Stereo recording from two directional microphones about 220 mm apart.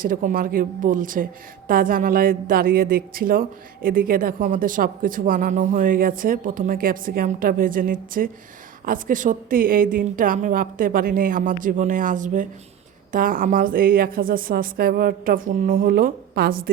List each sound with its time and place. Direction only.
0.0 s speech: 40° right (ahead or behind)